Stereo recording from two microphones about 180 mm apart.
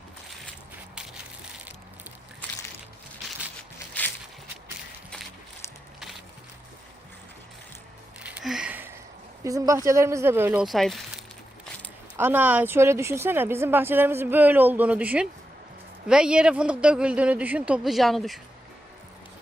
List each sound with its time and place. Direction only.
0.9 s crushing: 5° right (ahead or behind)
8.2 s music: 5° right (ahead or behind)
9.4 s speech: 15° right (ahead or behind)
10.7 s a man's voice: centre (ahead or behind)
12.1 s a man's voice: 10° right (ahead or behind)